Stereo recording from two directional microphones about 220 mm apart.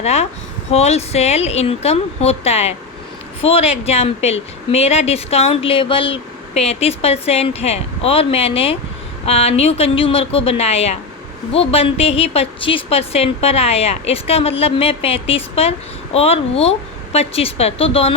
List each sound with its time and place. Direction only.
0.0 s speech: 30° left (ahead or behind)